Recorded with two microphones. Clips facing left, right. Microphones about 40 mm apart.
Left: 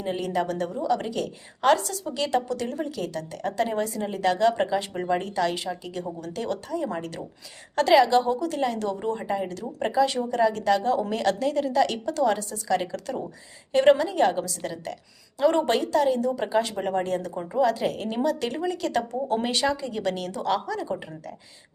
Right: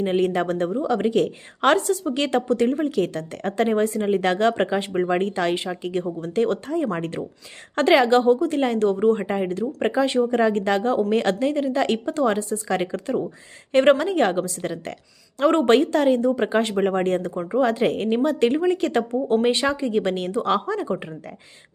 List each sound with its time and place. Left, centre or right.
0.0 s speech: right
13.7 s speech: right